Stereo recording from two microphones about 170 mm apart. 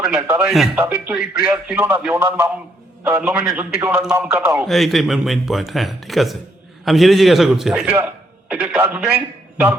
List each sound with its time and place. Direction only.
0.0 s speech: 5° right (ahead or behind)
4.6 s a man's voice: centre (ahead or behind)